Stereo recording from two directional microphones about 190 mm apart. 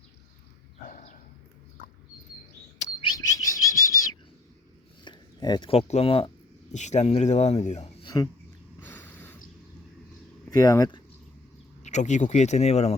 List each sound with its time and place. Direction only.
0.9 s a sound: 40° left (ahead or behind)
2.7 s chirp: 35° left (ahead or behind)
3.2 s bird: 15° left (ahead or behind)
5.0 s speech: 25° left (ahead or behind)
8.8 s a sound: 10° left (ahead or behind)
10.6 s speech: 20° left (ahead or behind)
11.8 s speech: 40° left (ahead or behind)